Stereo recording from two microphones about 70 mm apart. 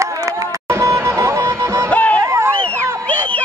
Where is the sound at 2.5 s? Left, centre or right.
Centre.